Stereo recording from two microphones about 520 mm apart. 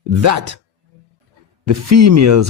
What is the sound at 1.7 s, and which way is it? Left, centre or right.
Speech, right.